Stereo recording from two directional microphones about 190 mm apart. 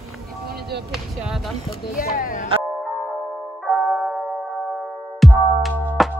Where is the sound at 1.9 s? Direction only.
50° left (ahead or behind).